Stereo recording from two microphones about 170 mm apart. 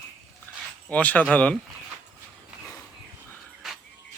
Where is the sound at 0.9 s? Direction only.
10° left (ahead or behind).